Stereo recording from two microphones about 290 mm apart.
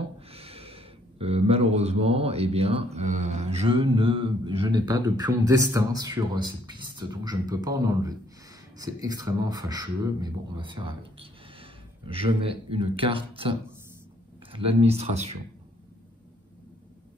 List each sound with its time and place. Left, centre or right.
0.3 s speech: centre